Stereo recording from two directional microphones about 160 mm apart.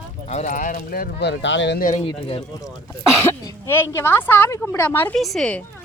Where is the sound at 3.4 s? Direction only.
15° left (ahead or behind).